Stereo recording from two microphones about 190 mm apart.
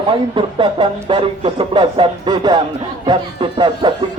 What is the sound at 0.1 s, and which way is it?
Speech, 25° right (ahead or behind).